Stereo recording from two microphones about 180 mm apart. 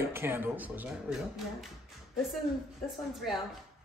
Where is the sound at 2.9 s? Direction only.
Centre (ahead or behind).